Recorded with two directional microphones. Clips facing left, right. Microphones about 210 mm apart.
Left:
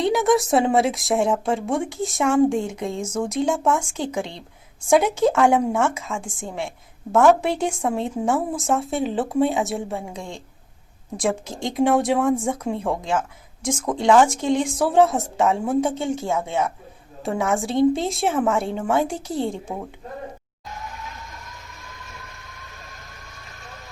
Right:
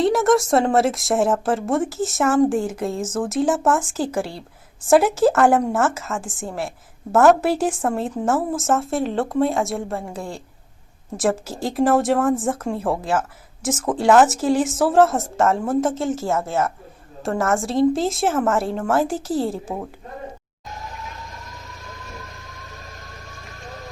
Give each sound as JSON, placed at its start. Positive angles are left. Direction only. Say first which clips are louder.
{"t": 0.0, "sound": "a woman's voice", "louder": "right 2 dB", "side_deg": 0}